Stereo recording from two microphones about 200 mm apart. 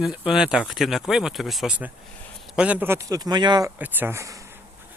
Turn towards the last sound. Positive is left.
turn(degrees=-15)  # may be behind; listen again after turning